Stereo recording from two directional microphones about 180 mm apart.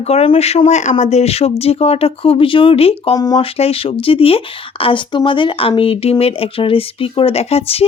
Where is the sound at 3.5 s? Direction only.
35° left (ahead or behind).